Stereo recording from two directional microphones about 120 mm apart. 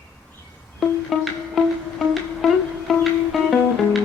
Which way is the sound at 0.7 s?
Centre (ahead or behind).